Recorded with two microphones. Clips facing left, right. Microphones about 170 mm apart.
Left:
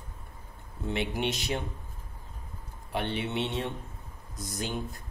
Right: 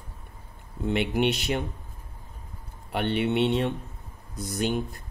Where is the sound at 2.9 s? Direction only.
65° right (ahead or behind).